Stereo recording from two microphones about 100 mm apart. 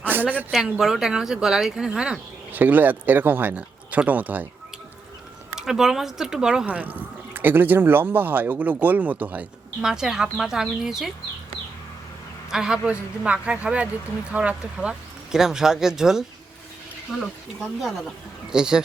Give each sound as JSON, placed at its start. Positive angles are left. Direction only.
{"t": 0.0, "sound": "a sound", "side_deg": -20}
{"t": 0.5, "sound": "speech", "side_deg": -5}
{"t": 5.5, "sound": "speech", "side_deg": -5}
{"t": 9.8, "sound": "speech", "side_deg": -5}
{"t": 12.5, "sound": "speech", "side_deg": -5}
{"t": 17.6, "sound": "speech", "side_deg": 0}